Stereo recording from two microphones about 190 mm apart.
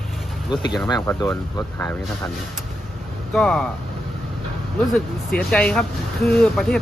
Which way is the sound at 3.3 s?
5° left (ahead or behind).